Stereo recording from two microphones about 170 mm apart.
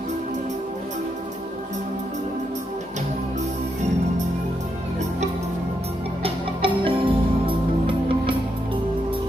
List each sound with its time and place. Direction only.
6.2 s music: 30° right (ahead or behind)